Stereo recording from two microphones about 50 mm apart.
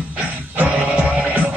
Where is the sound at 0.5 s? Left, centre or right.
Right.